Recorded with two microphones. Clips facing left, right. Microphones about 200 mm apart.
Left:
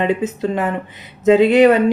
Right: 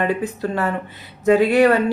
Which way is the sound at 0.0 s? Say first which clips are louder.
Left 3 dB; 20° left (ahead or behind).